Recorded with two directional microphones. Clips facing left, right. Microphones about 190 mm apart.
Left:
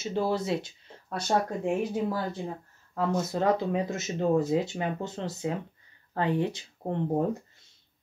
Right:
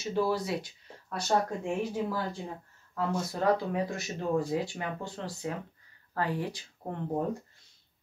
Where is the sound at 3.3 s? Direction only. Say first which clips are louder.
Left 1 dB; 20° left (ahead or behind).